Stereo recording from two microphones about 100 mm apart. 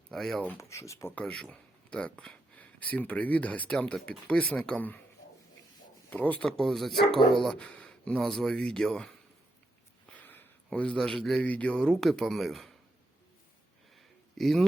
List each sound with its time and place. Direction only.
0.1 s speech: 5° left (ahead or behind)
0.4 s speech: 30° left (ahead or behind)
1.1 s a man's voice: 10° left (ahead or behind)
6.1 s a man's voice: 15° left (ahead or behind)
6.6 s speech: centre (ahead or behind)
10.7 s a man's voice: 10° left (ahead or behind)
13.9 s a sound: 5° left (ahead or behind)